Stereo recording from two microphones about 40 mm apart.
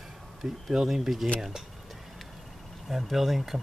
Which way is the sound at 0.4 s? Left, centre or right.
Centre.